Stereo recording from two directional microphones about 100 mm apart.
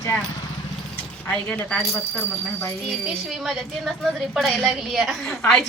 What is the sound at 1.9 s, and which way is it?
Speech, 25° left (ahead or behind).